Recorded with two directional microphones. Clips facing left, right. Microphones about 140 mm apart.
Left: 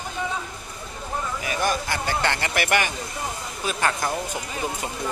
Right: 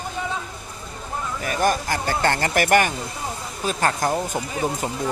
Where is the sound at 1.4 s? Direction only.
45° right (ahead or behind).